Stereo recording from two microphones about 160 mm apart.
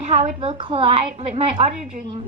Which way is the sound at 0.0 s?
50° right (ahead or behind).